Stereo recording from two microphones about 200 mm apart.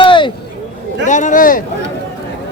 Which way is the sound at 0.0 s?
25° left (ahead or behind).